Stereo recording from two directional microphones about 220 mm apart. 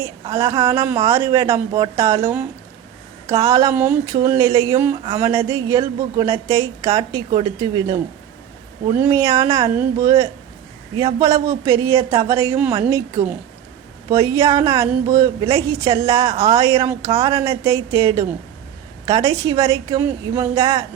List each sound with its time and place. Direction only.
0.3 s speech: 15° right (ahead or behind)
9.0 s speech: 15° right (ahead or behind)
11.4 s speech: 15° right (ahead or behind)
17.1 s speech: 25° right (ahead or behind)
17.3 s speech: 15° right (ahead or behind)